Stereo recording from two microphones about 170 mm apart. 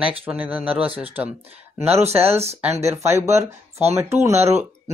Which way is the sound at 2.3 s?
15° right (ahead or behind).